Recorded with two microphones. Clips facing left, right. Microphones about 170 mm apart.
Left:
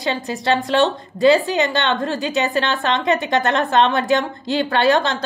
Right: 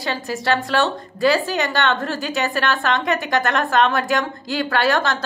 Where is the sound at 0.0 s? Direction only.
20° left (ahead or behind).